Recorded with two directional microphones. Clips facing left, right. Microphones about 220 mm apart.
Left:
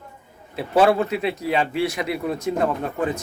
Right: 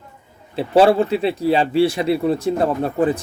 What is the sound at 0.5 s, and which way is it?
A man's voice, 30° right (ahead or behind).